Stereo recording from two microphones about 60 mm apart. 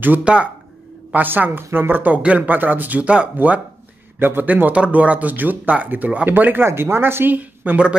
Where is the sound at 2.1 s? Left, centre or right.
Right.